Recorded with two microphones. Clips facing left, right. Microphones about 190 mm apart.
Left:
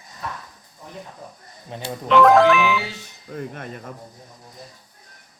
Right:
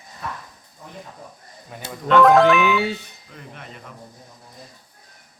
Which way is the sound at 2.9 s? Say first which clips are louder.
Right 9 dB; 60° right (ahead or behind).